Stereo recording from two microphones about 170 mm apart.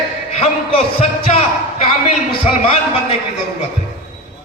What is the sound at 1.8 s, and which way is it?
Speech, 35° left (ahead or behind).